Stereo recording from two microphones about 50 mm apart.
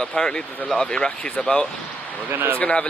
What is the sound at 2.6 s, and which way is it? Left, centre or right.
Speech, centre.